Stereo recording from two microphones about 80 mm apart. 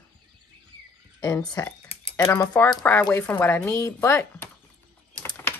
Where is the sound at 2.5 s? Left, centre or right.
Left.